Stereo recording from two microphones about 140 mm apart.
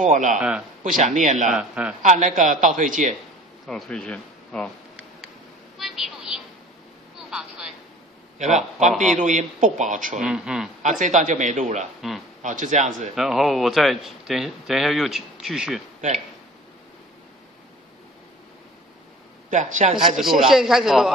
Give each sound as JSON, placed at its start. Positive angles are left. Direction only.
{"t": 0.0, "sound": "a man's voice", "side_deg": -65}
{"t": 0.4, "sound": "speech", "side_deg": -5}
{"t": 0.8, "sound": "a man's voice", "side_deg": -60}
{"t": 1.5, "sound": "a man's voice", "side_deg": -5}
{"t": 2.0, "sound": "a man's voice", "side_deg": -60}
{"t": 3.6, "sound": "speech", "side_deg": 0}
{"t": 5.8, "sound": "a sound", "side_deg": 0}
{"t": 8.4, "sound": "a man's voice", "side_deg": -55}
{"t": 10.2, "sound": "speech", "side_deg": -5}
{"t": 10.8, "sound": "a man's voice", "side_deg": -65}
{"t": 13.1, "sound": "speech", "side_deg": 0}
{"t": 19.5, "sound": "a man's voice", "side_deg": -60}
{"t": 20.2, "sound": "speech", "side_deg": 0}